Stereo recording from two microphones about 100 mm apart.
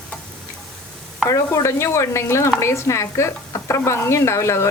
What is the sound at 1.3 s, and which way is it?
Speech, 30° left (ahead or behind).